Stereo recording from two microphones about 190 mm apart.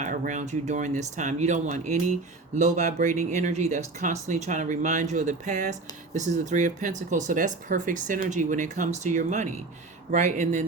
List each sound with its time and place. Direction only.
0.0 s speech: 40° right (ahead or behind)